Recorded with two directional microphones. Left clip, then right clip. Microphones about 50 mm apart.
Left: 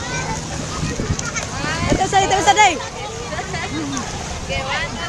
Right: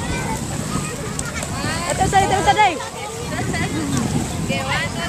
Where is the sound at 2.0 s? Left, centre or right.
Left.